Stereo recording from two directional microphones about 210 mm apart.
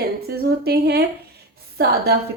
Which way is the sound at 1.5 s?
50° right (ahead or behind).